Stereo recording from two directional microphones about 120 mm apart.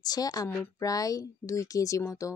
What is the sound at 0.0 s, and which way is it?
A woman's voice, 30° left (ahead or behind).